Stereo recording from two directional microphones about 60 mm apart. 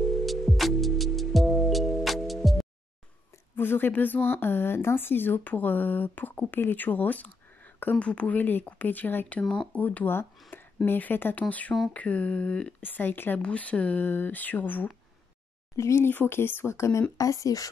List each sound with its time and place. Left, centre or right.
0.0 s music: centre
3.5 s speech: left
10.5 s a sound: left
10.9 s speech: left
12.8 s speech: left
13.4 s speech: left
15.7 s speech: left
16.1 s speech: left
16.7 s speech: left
17.2 s speech: left